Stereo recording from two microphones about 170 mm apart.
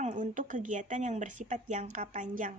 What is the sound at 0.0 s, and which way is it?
Speech, 45° right (ahead or behind).